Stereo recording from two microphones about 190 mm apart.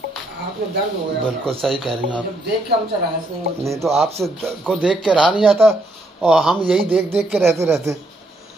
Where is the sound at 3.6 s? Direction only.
15° right (ahead or behind); by 7.5 s centre (ahead or behind).